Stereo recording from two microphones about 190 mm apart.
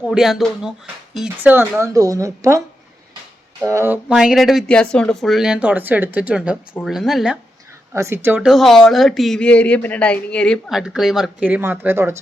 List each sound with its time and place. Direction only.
0.0 s speech: 5° right (ahead or behind)
7.9 s speech: 15° right (ahead or behind)